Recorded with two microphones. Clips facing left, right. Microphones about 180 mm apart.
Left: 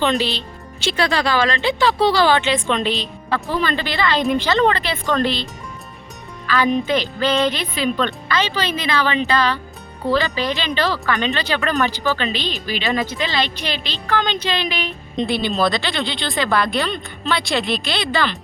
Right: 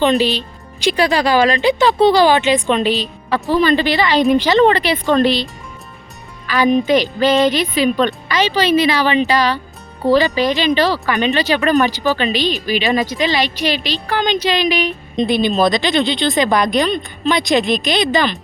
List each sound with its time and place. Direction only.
0.0 s speech: 15° right (ahead or behind)
6.5 s speech: 15° right (ahead or behind)